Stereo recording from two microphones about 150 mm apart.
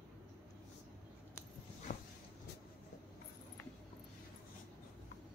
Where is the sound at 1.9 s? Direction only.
55° left (ahead or behind).